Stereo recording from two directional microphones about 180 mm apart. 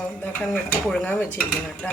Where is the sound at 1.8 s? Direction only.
5° left (ahead or behind).